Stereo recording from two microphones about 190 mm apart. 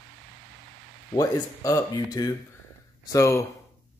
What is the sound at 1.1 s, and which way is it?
Speech, 20° left (ahead or behind).